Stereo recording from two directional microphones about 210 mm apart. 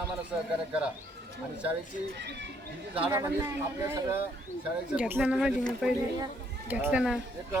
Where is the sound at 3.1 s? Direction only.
10° right (ahead or behind).